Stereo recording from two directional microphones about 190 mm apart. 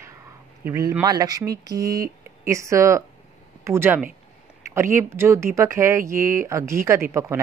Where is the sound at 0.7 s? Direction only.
15° right (ahead or behind).